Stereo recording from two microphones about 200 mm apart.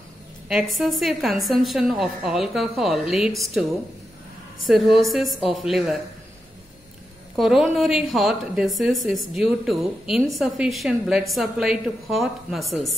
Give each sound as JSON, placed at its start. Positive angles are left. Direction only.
{"t": 0.5, "sound": "a woman's voice", "side_deg": 0}
{"t": 4.6, "sound": "a woman's voice", "side_deg": 0}
{"t": 7.3, "sound": "a woman's voice", "side_deg": 0}